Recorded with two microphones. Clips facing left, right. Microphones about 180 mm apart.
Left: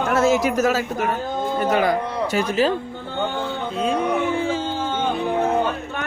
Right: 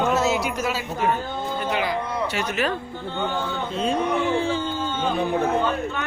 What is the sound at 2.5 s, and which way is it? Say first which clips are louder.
Speech: left 7 dB; 30° left (ahead or behind).